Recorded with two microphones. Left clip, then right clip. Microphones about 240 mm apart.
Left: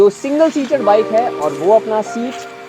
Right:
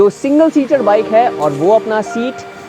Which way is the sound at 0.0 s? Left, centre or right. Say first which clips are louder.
Right 1 dB; right.